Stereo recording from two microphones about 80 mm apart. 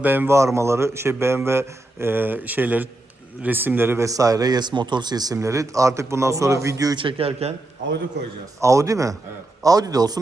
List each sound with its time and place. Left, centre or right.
0.0 s speech: right
0.3 s a man's voice: right
4.0 s speech: right
5.4 s a man's voice: right
6.9 s speech: right
8.6 s speech: right